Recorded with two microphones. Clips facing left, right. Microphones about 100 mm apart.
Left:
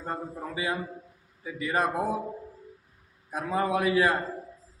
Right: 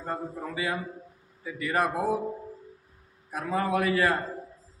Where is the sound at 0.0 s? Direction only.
20° left (ahead or behind).